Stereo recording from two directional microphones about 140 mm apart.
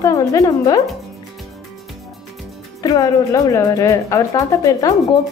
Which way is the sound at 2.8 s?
25° left (ahead or behind).